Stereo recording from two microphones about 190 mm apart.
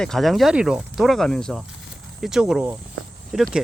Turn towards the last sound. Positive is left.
turn(degrees=0)  # may be behind; listen again after turning